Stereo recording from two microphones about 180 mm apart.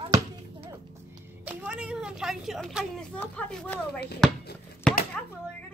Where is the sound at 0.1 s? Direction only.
20° right (ahead or behind).